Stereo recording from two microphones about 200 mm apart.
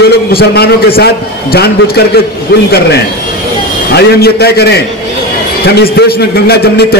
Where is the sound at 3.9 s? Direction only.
55° left (ahead or behind).